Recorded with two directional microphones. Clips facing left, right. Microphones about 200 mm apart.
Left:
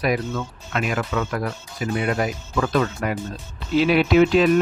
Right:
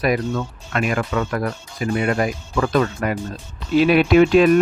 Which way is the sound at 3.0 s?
50° right (ahead or behind).